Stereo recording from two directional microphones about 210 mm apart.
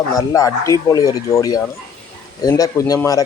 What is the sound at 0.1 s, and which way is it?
A man's voice, 15° left (ahead or behind).